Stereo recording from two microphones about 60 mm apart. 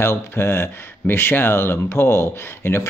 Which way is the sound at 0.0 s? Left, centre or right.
Left.